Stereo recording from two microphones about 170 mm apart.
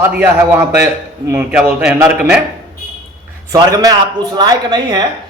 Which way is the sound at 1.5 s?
5° right (ahead or behind).